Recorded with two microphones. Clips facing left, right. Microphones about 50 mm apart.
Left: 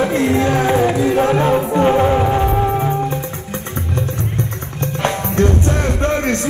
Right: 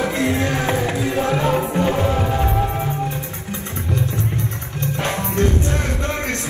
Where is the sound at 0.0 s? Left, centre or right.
Left.